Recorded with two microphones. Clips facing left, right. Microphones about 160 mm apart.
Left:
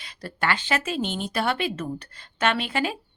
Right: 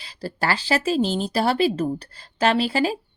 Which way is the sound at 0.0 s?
30° right (ahead or behind).